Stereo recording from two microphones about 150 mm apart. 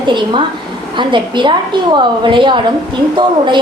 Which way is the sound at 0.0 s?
30° right (ahead or behind).